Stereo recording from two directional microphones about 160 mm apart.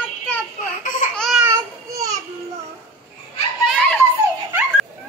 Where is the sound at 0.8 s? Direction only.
55° left (ahead or behind).